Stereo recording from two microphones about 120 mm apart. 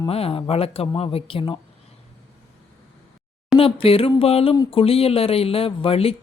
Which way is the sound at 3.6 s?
50° left (ahead or behind).